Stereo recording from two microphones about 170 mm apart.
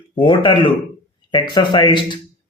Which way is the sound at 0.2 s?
30° left (ahead or behind).